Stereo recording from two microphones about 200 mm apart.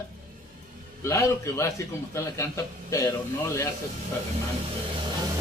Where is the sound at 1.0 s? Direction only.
15° left (ahead or behind).